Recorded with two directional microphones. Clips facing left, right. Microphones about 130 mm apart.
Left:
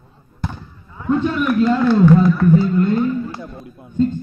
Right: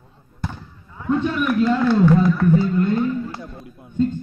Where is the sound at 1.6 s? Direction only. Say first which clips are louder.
Left 3 dB; 40° left (ahead or behind).